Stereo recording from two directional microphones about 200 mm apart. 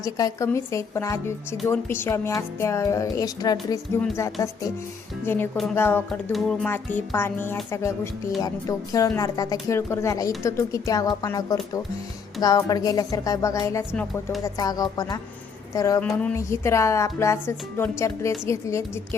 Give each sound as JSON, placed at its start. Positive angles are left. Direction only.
{"t": 0.0, "sound": "speech", "side_deg": 15}
{"t": 14.4, "sound": "a woman's voice", "side_deg": 20}
{"t": 16.0, "sound": "speech", "side_deg": 5}